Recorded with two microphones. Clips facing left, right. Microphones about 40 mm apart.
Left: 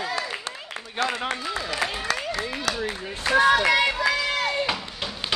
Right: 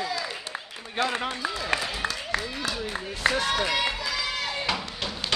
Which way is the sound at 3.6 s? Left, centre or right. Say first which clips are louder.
Left 7 dB; left.